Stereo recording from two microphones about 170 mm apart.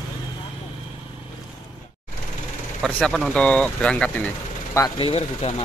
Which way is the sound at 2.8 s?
5° left (ahead or behind).